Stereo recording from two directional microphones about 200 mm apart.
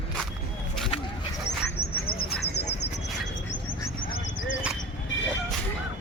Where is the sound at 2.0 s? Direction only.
50° left (ahead or behind).